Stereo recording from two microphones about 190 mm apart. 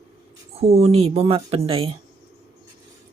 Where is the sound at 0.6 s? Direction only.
35° right (ahead or behind).